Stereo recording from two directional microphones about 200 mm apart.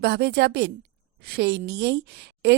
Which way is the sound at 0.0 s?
55° right (ahead or behind).